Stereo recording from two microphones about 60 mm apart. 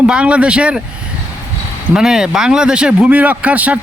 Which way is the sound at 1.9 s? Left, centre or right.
Centre.